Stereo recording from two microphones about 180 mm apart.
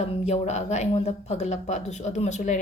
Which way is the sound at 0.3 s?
40° left (ahead or behind).